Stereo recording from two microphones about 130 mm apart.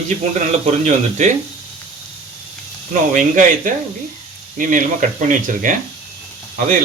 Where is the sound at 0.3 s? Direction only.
65° right (ahead or behind).